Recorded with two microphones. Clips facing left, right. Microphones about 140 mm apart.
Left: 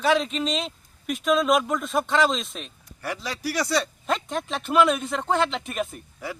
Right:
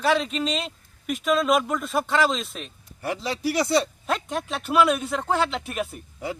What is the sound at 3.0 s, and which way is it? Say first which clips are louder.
Speech: right 4 dB; 25° right (ahead or behind).